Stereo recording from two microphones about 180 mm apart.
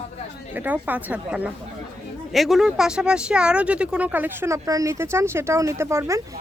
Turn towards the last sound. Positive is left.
turn(degrees=-15)  # may be behind; listen again after turning